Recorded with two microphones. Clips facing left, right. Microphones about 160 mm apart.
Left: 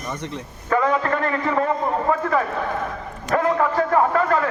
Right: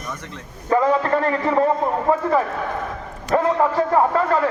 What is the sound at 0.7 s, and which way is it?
A man's voice, 30° right (ahead or behind).